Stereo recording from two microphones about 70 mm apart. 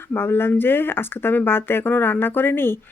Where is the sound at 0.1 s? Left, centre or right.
Left.